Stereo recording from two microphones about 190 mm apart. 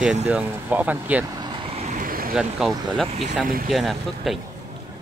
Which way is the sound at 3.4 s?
50° right (ahead or behind).